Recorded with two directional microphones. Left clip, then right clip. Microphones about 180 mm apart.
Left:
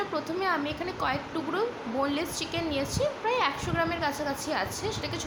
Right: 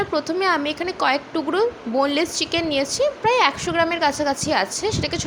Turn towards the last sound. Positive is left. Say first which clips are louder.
# right 9 dB
turn(degrees=-40)  # may be behind; listen again after turning